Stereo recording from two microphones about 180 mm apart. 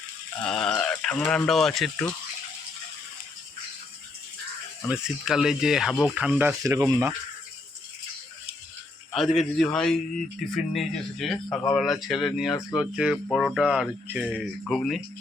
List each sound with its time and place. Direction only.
0.3 s speech: 5° left (ahead or behind)
4.8 s speech: centre (ahead or behind)
6.6 s speech: 15° right (ahead or behind)
9.4 s speech: centre (ahead or behind)